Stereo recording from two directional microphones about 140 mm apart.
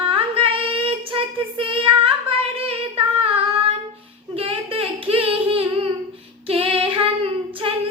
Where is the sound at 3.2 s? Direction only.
45° right (ahead or behind).